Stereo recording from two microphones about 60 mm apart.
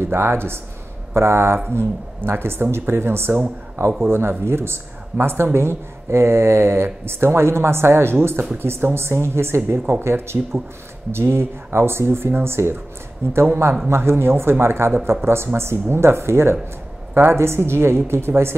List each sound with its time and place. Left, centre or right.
0.0 s speech: right
3.8 s speech: right